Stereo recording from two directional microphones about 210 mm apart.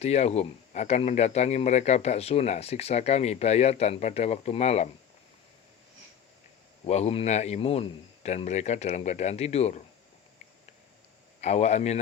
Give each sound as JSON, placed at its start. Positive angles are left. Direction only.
{"t": 0.0, "sound": "speech", "side_deg": 30}
{"t": 6.8, "sound": "speech", "side_deg": 30}
{"t": 11.3, "sound": "a man's voice", "side_deg": 30}